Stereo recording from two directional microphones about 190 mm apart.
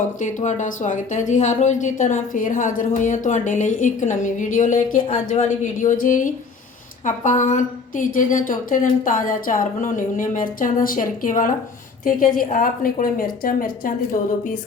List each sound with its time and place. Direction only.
0.2 s a woman's voice: 40° left (ahead or behind)